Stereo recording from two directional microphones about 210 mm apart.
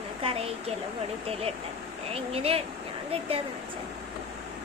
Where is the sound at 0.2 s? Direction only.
25° right (ahead or behind).